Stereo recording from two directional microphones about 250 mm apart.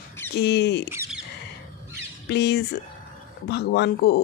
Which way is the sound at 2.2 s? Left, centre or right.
Left.